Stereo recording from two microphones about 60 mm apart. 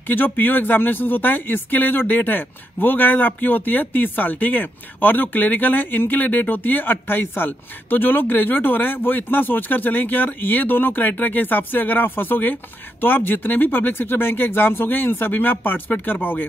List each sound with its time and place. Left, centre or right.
0.0 s speech: left